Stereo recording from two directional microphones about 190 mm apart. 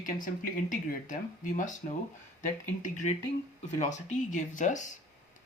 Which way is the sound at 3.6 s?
40° left (ahead or behind).